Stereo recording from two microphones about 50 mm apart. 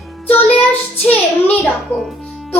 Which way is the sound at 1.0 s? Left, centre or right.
Left.